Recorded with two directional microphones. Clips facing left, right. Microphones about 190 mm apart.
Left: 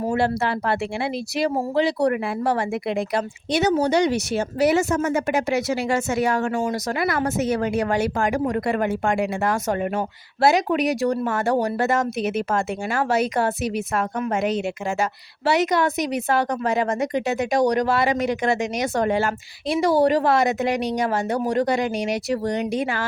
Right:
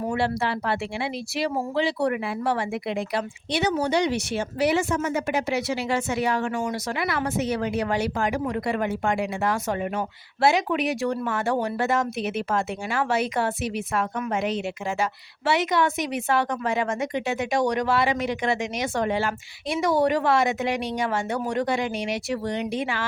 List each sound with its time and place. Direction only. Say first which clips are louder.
0.1 s speech: left 4 dB; 45° left (ahead or behind)
10.4 s a woman's voice: left 3 dB; 40° left (ahead or behind)